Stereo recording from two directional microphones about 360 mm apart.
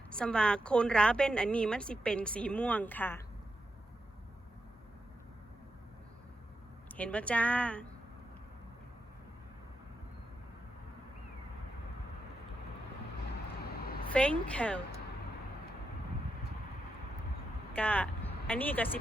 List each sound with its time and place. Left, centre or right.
0.1 s a woman's voice: centre
6.8 s a woman's voice: centre
13.6 s vehicle: left
14.1 s a woman's voice: centre
17.7 s speech: centre